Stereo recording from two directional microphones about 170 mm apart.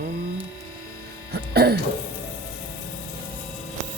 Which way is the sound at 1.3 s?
70° right (ahead or behind).